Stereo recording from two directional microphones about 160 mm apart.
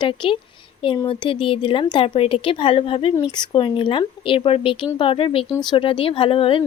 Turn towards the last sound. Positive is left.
turn(degrees=35)  # may be behind; listen again after turning